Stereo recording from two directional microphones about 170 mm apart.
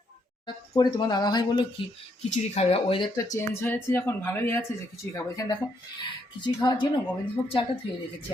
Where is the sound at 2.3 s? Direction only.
40° left (ahead or behind).